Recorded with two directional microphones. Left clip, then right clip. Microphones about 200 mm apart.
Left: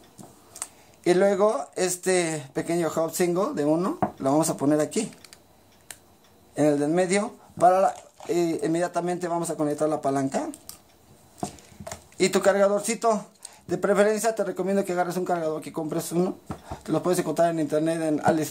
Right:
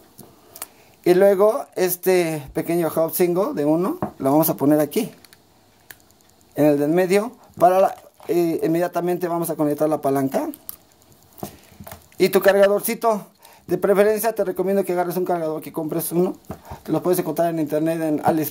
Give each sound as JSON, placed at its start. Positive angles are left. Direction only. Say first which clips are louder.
{"t": 0.5, "sound": "speech", "louder": "right 1 dB", "side_deg": -40}
{"t": 6.5, "sound": "speech", "louder": "right 5 dB", "side_deg": -40}
{"t": 12.2, "sound": "speech", "louder": "right 6 dB", "side_deg": -35}